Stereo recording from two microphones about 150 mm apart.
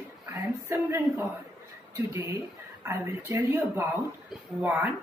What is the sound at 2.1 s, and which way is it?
Speech, 15° right (ahead or behind).